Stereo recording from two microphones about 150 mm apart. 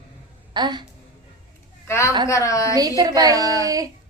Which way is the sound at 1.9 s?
20° left (ahead or behind).